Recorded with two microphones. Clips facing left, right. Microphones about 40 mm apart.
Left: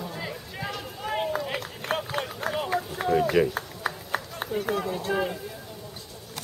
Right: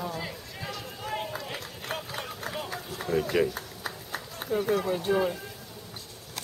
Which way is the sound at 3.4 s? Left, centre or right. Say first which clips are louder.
Left 5 dB; left.